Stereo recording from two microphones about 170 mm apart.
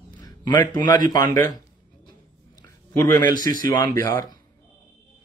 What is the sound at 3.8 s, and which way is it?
Speech, 20° left (ahead or behind).